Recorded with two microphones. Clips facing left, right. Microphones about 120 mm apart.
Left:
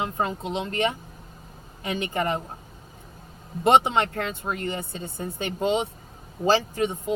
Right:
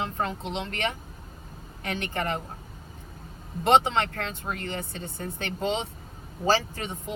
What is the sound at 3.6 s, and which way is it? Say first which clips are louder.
Speech: left 2 dB; 10° left (ahead or behind).